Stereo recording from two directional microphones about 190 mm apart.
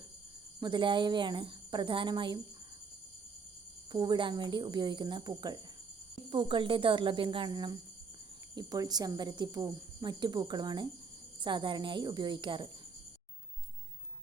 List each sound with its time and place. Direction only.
0.6 s speech: 25° right (ahead or behind)
3.9 s speech: 25° right (ahead or behind)